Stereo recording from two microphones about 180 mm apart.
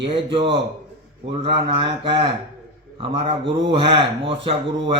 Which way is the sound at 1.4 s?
30° right (ahead or behind).